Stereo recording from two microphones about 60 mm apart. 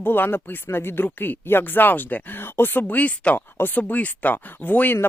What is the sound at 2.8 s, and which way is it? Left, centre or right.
Speech, left.